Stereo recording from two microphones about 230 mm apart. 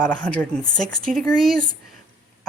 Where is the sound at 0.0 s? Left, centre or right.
Centre.